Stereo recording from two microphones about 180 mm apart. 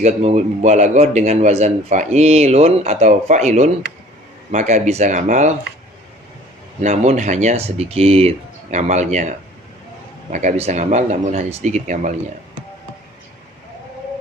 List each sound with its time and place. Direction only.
0.0 s speech: 35° right (ahead or behind)
6.8 s speech: 40° right (ahead or behind)
10.3 s speech: 40° right (ahead or behind)